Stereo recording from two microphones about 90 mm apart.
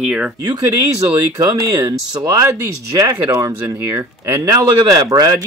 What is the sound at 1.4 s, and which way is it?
Speech, 45° right (ahead or behind).